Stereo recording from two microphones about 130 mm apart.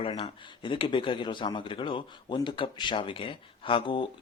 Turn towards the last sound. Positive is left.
turn(degrees=40)  # may be behind; listen again after turning